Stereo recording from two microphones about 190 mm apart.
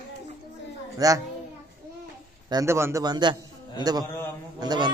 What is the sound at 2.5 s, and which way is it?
Speech, 15° right (ahead or behind).